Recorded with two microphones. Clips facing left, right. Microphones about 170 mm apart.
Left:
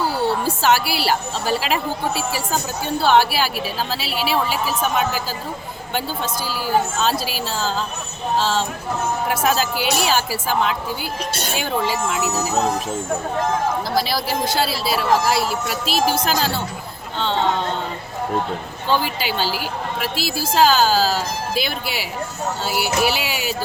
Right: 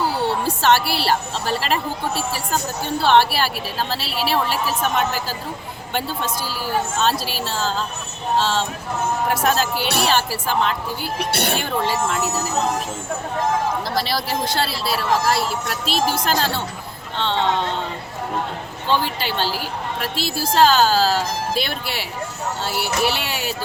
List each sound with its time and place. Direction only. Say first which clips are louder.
0.4 s a woman's voice: even; 5° left (ahead or behind)
11.2 s speech: right 4 dB; 65° right (ahead or behind)
11.5 s a woman's voice: even; 5° left (ahead or behind)
13.9 s a woman's voice: left 2 dB; centre (ahead or behind)
18.9 s a woman's voice: left 1 dB; 5° left (ahead or behind)